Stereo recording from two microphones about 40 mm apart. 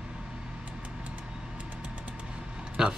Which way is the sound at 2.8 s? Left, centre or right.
Centre.